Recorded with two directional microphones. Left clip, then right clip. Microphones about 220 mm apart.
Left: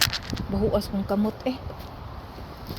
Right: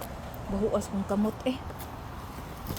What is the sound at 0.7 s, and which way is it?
Speech, 15° left (ahead or behind).